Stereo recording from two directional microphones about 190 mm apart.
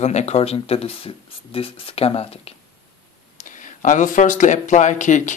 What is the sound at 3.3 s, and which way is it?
Speech, 40° left (ahead or behind).